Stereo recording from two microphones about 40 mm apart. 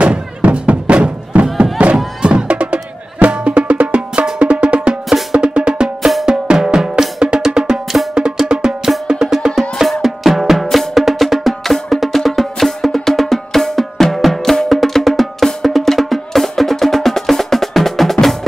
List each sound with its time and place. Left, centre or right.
0.0 s music: right
5.3 s drum: right
8.5 s music: centre